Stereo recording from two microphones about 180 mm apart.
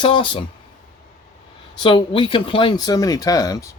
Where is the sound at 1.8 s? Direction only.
25° left (ahead or behind).